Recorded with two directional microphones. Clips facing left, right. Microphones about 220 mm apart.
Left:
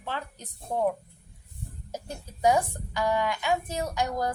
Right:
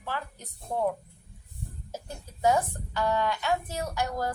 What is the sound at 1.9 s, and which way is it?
A woman's voice, 15° left (ahead or behind).